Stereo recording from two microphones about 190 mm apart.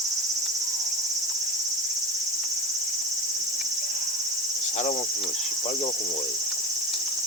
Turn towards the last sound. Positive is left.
turn(degrees=35)  # may be behind; listen again after turning